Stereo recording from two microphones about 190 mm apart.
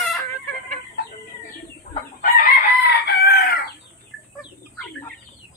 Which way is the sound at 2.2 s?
50° left (ahead or behind).